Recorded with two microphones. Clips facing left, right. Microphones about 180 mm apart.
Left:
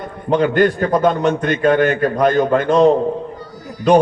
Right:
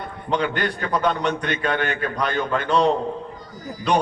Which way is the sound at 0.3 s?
45° left (ahead or behind).